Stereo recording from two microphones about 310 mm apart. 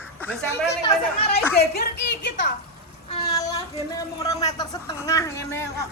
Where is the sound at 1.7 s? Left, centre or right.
Left.